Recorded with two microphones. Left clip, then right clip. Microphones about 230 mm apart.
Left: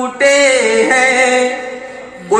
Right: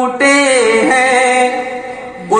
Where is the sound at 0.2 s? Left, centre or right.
Right.